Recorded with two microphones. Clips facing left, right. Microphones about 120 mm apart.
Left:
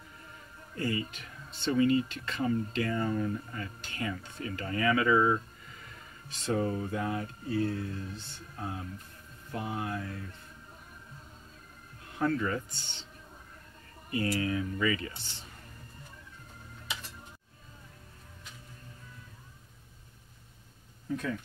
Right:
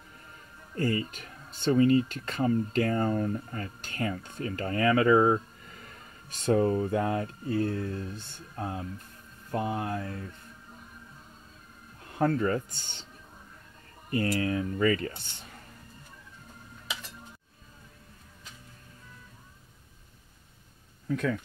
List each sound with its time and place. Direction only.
0.7 s speech: 45° right (ahead or behind)
12.1 s speech: 45° right (ahead or behind)
14.1 s speech: 40° right (ahead or behind)
21.1 s speech: 90° right